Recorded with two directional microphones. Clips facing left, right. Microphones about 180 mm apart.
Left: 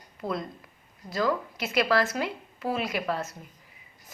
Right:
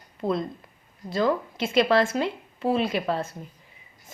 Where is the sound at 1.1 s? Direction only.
25° right (ahead or behind).